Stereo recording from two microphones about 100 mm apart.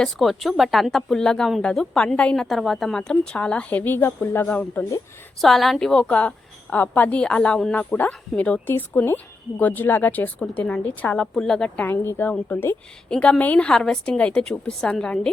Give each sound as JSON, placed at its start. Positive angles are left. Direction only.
{"t": 0.0, "sound": "a woman's voice", "side_deg": 0}
{"t": 5.4, "sound": "a woman's voice", "side_deg": 0}
{"t": 11.9, "sound": "speech", "side_deg": 20}
{"t": 13.1, "sound": "a woman's voice", "side_deg": 10}